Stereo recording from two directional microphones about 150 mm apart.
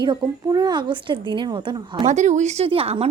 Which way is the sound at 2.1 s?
50° right (ahead or behind).